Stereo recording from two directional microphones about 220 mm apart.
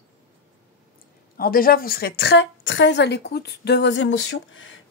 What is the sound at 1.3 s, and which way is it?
A woman's voice, 40° left (ahead or behind).